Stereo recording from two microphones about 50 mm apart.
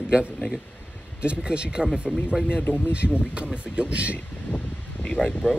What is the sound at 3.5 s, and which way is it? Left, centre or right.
Speech, right.